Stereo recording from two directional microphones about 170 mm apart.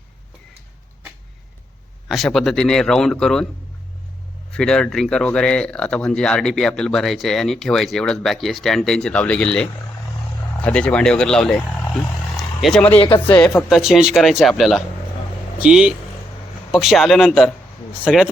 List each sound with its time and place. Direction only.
2.0 s speech: centre (ahead or behind)
4.5 s speech: 5° left (ahead or behind)
13.0 s speech: 30° left (ahead or behind)
13.7 s speech: centre (ahead or behind)